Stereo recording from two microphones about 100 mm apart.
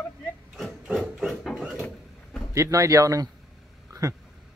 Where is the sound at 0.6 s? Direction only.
Centre (ahead or behind).